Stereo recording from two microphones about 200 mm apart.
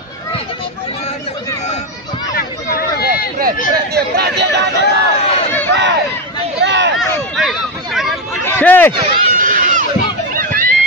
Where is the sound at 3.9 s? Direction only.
55° right (ahead or behind).